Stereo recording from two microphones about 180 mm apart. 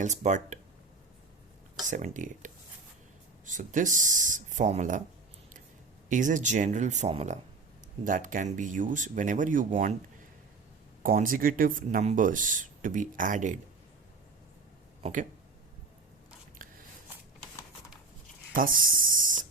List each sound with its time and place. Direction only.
0.0 s speech: 40° right (ahead or behind)
1.9 s speech: 45° right (ahead or behind)
6.1 s speech: 45° right (ahead or behind)
11.0 s speech: 50° right (ahead or behind)
15.0 s speech: 45° right (ahead or behind)
18.5 s speech: 50° right (ahead or behind)